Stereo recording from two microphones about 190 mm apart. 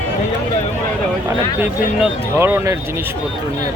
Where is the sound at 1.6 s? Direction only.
10° right (ahead or behind).